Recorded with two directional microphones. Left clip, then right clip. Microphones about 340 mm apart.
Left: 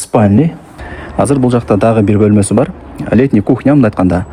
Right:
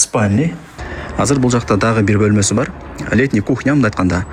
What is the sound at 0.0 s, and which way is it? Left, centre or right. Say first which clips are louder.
Speech: left 5 dB; centre.